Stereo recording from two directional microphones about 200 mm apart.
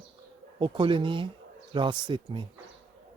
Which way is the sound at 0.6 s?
25° right (ahead or behind).